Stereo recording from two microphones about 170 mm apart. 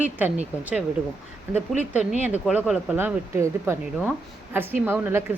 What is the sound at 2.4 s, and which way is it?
Speech, 5° right (ahead or behind).